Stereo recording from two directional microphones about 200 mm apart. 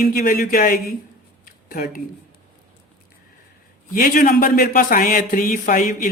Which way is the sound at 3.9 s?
45° left (ahead or behind).